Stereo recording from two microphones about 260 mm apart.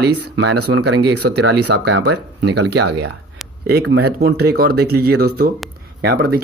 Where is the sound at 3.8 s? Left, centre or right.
Right.